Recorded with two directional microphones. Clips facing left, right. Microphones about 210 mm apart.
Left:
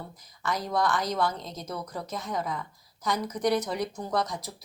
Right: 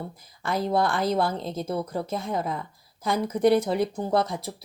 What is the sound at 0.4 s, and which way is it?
Speech, 30° right (ahead or behind).